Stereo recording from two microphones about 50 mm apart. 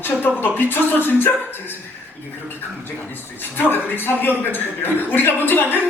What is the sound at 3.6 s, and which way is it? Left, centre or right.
A man's voice, left.